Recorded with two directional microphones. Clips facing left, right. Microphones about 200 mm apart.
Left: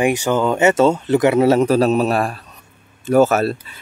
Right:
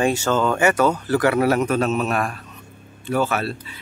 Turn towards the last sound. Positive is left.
turn(degrees=40)  # may be behind; listen again after turning